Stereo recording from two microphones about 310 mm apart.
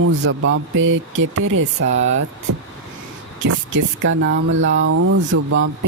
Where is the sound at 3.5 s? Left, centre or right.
Right.